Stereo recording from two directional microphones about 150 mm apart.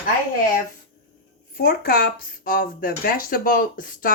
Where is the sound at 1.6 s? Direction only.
80° left.